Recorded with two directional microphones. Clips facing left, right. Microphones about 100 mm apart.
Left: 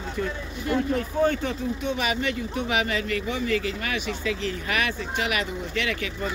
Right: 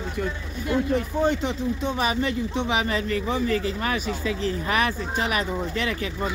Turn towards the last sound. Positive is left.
turn(degrees=-35)  # may be behind; listen again after turning